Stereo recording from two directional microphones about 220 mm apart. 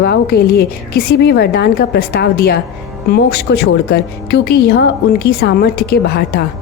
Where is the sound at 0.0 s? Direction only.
45° left (ahead or behind).